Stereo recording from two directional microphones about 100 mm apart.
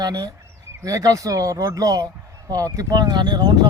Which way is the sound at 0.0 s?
40° right (ahead or behind).